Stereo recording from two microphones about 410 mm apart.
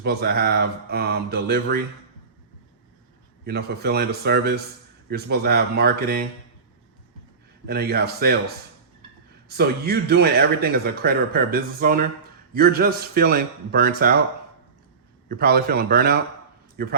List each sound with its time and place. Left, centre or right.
0.0 s speech: right
3.4 s speech: right
7.7 s speech: right
9.5 s speech: right
15.3 s speech: right